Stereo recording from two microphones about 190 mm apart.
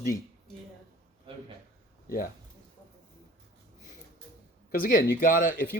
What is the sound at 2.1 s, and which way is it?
Speech, 50° left (ahead or behind).